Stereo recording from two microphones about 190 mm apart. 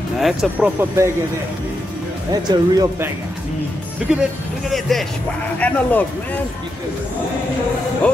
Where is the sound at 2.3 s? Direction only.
20° right (ahead or behind).